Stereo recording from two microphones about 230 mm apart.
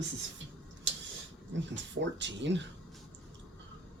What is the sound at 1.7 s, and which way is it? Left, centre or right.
Speech, right.